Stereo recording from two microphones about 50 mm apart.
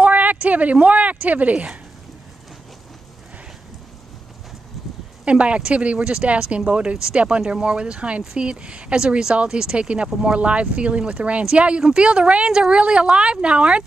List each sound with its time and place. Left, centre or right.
0.0 s speech: right
4.8 s a sound: centre
5.2 s speech: right